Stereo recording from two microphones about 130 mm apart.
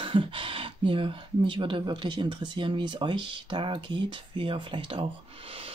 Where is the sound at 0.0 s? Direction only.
45° right (ahead or behind).